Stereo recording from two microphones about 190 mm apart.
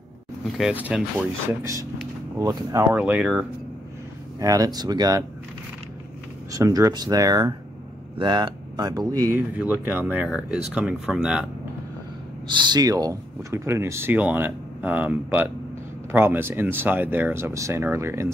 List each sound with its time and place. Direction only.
0.6 s speech: 5° right (ahead or behind)
2.9 s speech: 5° right (ahead or behind)
4.4 s speech: 20° right (ahead or behind)
6.5 s speech: 15° right (ahead or behind)
12.4 s speech: 25° right (ahead or behind)